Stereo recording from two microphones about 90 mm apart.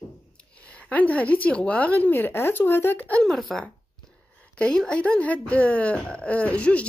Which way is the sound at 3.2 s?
5° left (ahead or behind).